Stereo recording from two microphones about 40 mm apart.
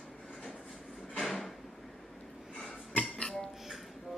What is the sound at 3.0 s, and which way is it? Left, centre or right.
Music, left.